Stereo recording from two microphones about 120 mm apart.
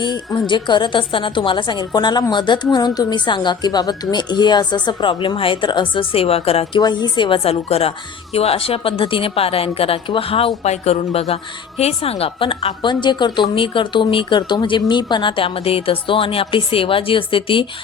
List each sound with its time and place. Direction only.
0.0 s a woman's voice: 35° left (ahead or behind); by 6.8 s 55° left (ahead or behind)
6.8 s a woman's voice: 40° left (ahead or behind)